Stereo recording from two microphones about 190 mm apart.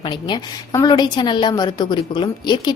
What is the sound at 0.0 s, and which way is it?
A woman's voice, 25° left (ahead or behind).